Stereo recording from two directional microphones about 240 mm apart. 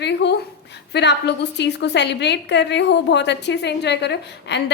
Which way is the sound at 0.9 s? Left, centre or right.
Left.